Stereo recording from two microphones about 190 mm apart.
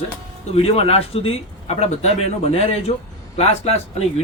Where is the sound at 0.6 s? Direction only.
30° left (ahead or behind).